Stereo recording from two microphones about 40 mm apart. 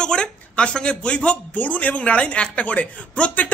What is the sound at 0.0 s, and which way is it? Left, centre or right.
Speech, left.